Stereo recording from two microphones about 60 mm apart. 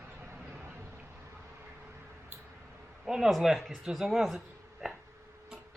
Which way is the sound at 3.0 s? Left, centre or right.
Centre.